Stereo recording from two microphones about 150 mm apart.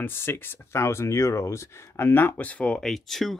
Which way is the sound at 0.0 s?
15° left (ahead or behind).